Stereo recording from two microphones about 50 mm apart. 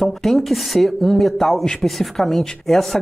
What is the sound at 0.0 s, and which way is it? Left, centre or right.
Speech, centre.